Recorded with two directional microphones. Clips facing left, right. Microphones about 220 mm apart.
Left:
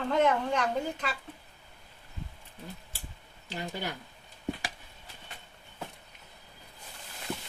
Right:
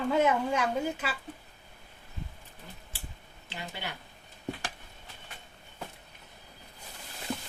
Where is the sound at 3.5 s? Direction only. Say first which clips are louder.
Left 4 dB; 40° left (ahead or behind).